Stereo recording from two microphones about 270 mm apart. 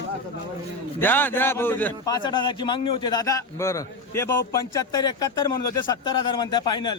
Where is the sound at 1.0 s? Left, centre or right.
Centre.